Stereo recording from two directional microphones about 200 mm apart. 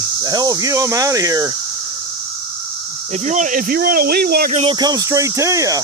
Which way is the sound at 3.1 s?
35° right (ahead or behind).